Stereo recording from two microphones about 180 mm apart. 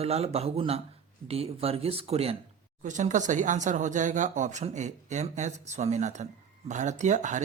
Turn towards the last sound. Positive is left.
turn(degrees=-40)  # may be behind; listen again after turning